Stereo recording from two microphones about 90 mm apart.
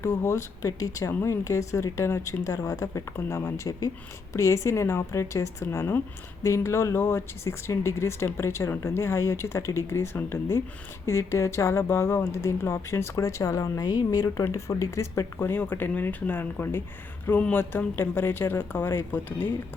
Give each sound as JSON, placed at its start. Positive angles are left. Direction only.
{"t": 0.0, "sound": "speech", "side_deg": 30}
{"t": 3.2, "sound": "speech", "side_deg": 30}
{"t": 3.7, "sound": "speech", "side_deg": 40}
{"t": 15.4, "sound": "speech", "side_deg": 20}